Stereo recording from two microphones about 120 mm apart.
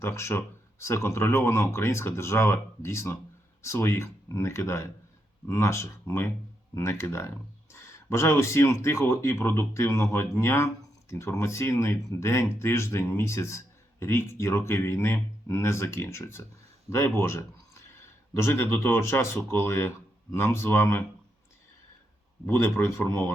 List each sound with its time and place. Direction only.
0.0 s speech: 25° left (ahead or behind)
22.4 s speech: 20° left (ahead or behind)